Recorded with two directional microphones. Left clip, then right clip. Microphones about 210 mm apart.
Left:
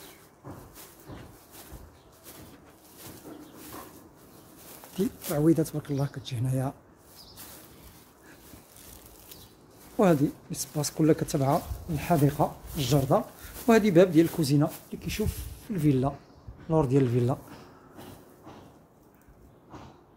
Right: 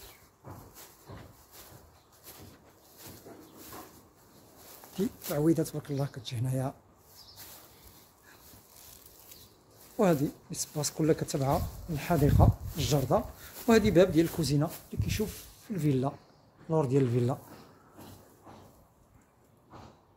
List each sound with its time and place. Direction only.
4.9 s speech: centre (ahead or behind)
9.9 s speech: 5° left (ahead or behind)